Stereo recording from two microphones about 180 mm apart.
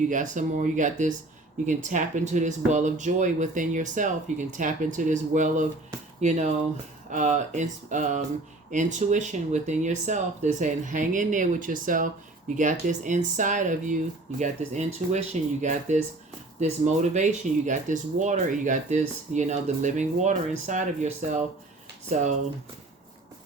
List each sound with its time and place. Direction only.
0.1 s speech: 45° right (ahead or behind)